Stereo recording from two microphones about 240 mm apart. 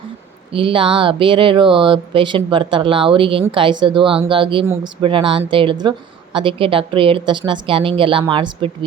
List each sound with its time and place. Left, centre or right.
0.5 s speech: right